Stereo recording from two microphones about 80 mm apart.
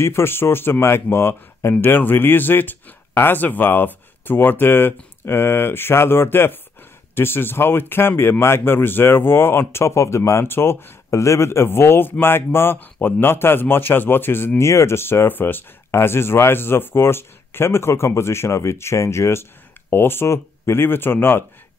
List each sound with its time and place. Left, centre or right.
0.0 s speech: left